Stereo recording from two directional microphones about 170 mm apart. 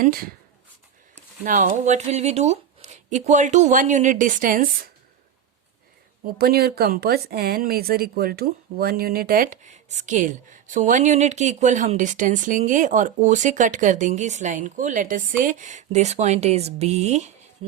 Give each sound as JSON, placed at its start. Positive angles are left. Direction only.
{"t": 0.0, "sound": "speech", "side_deg": -60}
{"t": 1.5, "sound": "speech", "side_deg": -50}
{"t": 6.4, "sound": "speech", "side_deg": -65}